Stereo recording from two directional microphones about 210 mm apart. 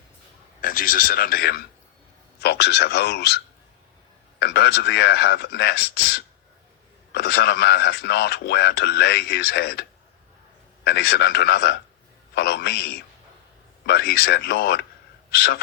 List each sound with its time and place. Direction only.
0.6 s a man's voice: 40° left (ahead or behind)
10.8 s a man's voice: 50° left (ahead or behind)